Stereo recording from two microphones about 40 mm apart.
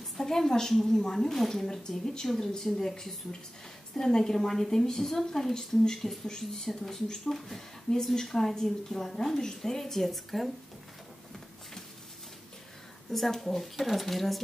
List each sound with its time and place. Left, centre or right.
0.2 s a woman's voice: centre
13.1 s speech: centre